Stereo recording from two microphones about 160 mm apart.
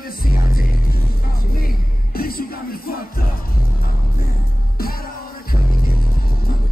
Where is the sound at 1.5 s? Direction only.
65° left (ahead or behind).